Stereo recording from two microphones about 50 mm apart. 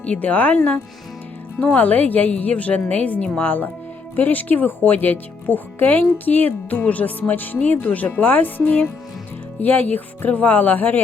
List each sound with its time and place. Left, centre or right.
0.0 s speech: left